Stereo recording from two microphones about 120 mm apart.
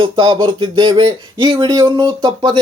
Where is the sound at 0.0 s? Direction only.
45° right (ahead or behind).